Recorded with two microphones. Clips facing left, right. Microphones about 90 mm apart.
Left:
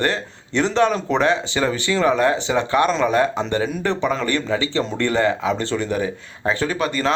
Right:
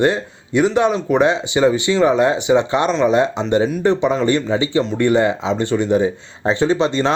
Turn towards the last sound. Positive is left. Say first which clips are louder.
# right 5 dB
turn(degrees=-25)  # may be behind; listen again after turning